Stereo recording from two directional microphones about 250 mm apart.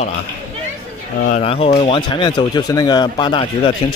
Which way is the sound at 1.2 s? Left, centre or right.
Left.